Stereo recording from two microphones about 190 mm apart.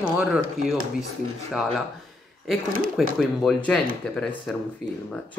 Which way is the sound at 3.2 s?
5° left (ahead or behind).